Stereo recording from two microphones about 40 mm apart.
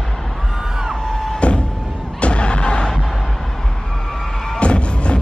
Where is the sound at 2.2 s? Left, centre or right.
Left.